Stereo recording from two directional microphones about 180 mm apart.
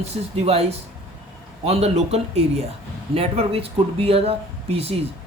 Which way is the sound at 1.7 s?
35° right (ahead or behind).